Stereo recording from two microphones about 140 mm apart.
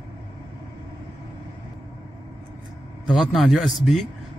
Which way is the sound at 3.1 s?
Centre (ahead or behind).